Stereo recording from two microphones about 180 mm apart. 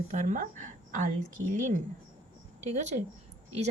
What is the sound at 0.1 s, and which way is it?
A woman's voice, 45° right (ahead or behind).